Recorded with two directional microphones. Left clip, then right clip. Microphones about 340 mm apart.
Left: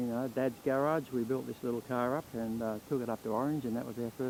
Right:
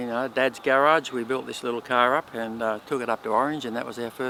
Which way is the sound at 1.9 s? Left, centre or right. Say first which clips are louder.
Right 15 dB; centre.